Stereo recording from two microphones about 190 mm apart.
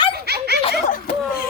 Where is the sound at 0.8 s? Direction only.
45° left (ahead or behind).